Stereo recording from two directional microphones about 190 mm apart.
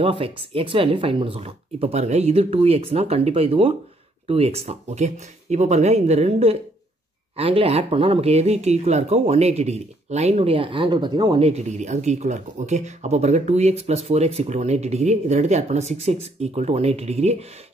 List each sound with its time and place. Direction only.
0.0 s speech: 30° right (ahead or behind)